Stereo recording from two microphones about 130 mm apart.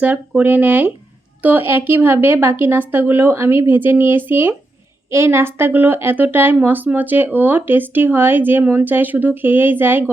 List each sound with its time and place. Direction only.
0.0 s speech: 15° right (ahead or behind)